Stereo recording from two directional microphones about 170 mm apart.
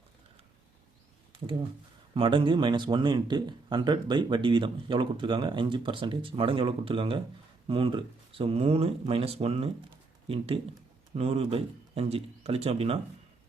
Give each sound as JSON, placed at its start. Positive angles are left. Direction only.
{"t": 2.1, "sound": "speech", "side_deg": -30}